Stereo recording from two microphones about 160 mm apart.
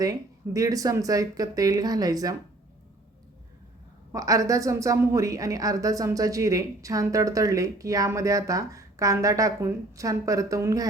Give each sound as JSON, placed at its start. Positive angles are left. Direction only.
{"t": 0.0, "sound": "a woman's voice", "side_deg": -20}
{"t": 4.1, "sound": "a woman's voice", "side_deg": -20}